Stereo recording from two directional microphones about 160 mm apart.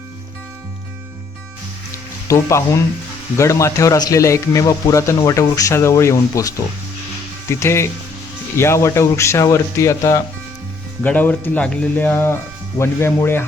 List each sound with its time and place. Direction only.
1.9 s music: 20° left (ahead or behind)
3.3 s a man's voice: 20° left (ahead or behind)
7.5 s speech: 15° left (ahead or behind)